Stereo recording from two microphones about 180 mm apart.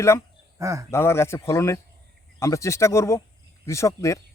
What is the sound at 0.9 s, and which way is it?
Speech, 15° left (ahead or behind).